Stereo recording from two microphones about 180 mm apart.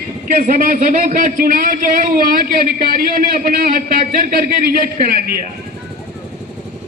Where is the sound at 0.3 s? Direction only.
50° right (ahead or behind).